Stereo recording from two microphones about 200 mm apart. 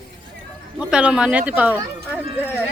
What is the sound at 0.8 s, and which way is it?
Speech, 5° right (ahead or behind).